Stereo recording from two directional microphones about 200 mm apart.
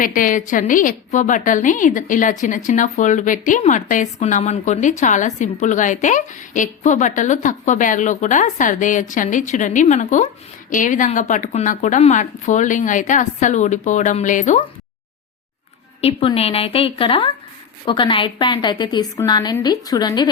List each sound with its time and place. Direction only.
0.0 s a woman's voice: 40° left (ahead or behind)
16.0 s a woman's voice: 30° left (ahead or behind)